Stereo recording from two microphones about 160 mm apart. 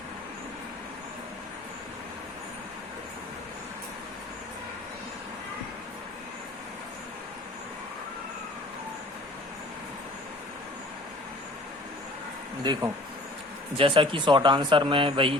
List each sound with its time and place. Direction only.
12.7 s speech: 25° right (ahead or behind)